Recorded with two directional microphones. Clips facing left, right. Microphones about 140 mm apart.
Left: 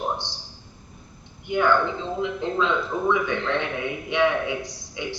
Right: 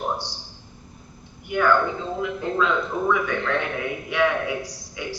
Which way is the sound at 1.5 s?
20° left (ahead or behind).